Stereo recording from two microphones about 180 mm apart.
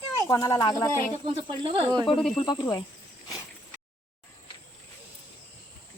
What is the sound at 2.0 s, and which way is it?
Speech, 25° left (ahead or behind).